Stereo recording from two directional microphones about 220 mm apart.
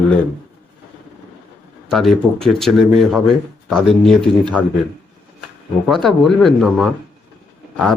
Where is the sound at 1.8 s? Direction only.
Centre (ahead or behind).